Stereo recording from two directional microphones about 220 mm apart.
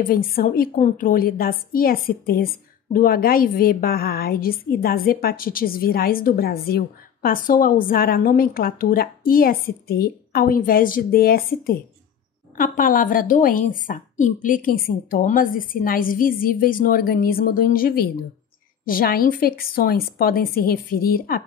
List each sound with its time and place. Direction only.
0.0 s a woman's voice: 40° left (ahead or behind)